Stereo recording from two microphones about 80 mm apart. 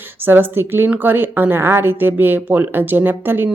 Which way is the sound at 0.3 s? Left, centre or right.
Right.